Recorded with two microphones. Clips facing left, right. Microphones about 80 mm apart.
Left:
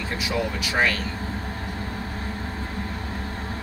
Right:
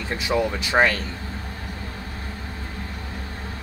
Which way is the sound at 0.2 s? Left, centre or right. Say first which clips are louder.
Right 5 dB; right.